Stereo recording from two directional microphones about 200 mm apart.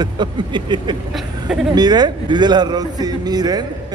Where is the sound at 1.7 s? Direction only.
20° right (ahead or behind).